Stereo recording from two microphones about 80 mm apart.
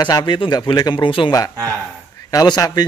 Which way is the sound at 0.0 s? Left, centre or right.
Left.